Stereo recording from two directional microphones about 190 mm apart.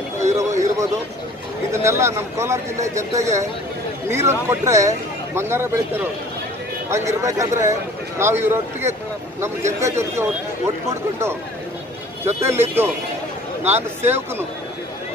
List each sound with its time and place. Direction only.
0.4 s a sound: 15° right (ahead or behind)
1.7 s speech: 15° right (ahead or behind)
12.4 s speech: 15° right (ahead or behind)